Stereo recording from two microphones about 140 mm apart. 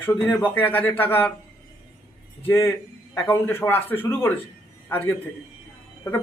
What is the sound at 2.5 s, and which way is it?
A man's voice, 20° left (ahead or behind).